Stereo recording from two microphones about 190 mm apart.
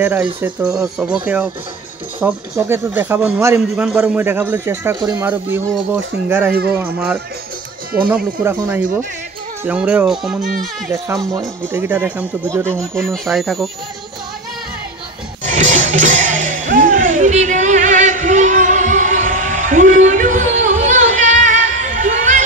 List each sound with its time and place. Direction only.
0.0 s speech: 10° right (ahead or behind)
8.5 s speech: 10° right (ahead or behind)
11.7 s speech: 10° right (ahead or behind)
12.9 s speech: centre (ahead or behind)
15.4 s music: 40° right (ahead or behind)
16.7 s a sound: 40° right (ahead or behind)